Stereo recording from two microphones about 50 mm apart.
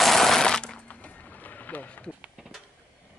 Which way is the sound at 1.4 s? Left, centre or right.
Left.